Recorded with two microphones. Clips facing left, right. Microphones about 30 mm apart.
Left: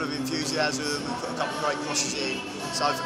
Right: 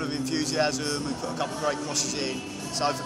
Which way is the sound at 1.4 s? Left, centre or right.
Left.